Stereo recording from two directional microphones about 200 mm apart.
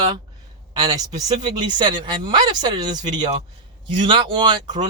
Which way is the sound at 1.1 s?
35° right (ahead or behind).